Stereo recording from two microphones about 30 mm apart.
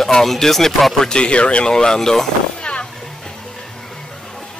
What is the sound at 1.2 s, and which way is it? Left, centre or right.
Speech, left.